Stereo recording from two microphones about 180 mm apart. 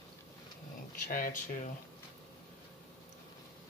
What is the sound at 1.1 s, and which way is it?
Speech, 50° left (ahead or behind).